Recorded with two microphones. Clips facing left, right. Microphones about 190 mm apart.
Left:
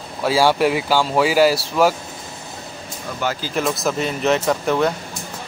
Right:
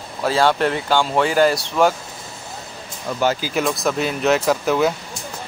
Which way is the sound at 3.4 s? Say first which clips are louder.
Right 1 dB; centre (ahead or behind).